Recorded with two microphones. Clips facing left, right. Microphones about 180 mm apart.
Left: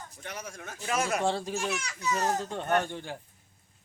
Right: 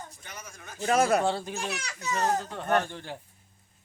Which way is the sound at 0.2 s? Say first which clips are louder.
Left 5 dB; 80° left.